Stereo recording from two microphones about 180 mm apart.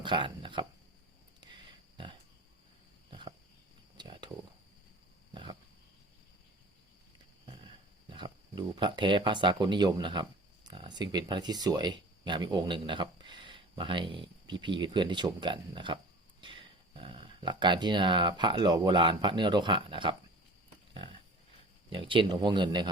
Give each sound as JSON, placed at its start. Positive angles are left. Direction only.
{"t": 0.0, "sound": "speech", "side_deg": -25}
{"t": 3.1, "sound": "a sound", "side_deg": -25}
{"t": 3.9, "sound": "cricket", "side_deg": -25}
{"t": 5.3, "sound": "wild animals", "side_deg": -25}
{"t": 8.1, "sound": "speech", "side_deg": -25}
{"t": 21.8, "sound": "speech", "side_deg": -30}